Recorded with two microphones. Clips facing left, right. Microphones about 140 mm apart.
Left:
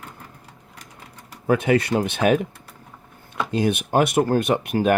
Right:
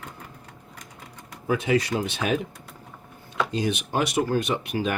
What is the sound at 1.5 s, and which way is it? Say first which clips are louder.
Speech: left 4 dB; 55° left (ahead or behind).